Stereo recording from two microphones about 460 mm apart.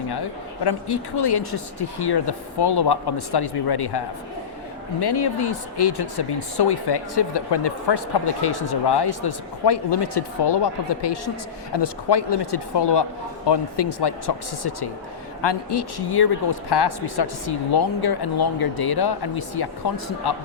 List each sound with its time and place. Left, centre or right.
0.1 s speech: left